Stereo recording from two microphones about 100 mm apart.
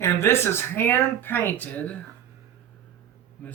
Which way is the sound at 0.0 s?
25° left (ahead or behind).